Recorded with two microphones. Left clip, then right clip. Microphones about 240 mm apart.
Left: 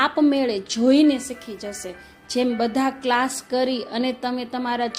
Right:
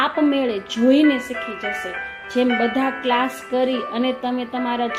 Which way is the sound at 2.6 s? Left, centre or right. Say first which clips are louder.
Right 2 dB; left.